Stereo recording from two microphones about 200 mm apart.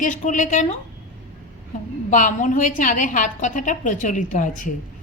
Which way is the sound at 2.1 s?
40° left (ahead or behind).